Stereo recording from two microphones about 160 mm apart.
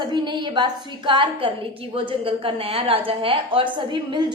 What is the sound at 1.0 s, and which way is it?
A woman's voice, 30° right (ahead or behind).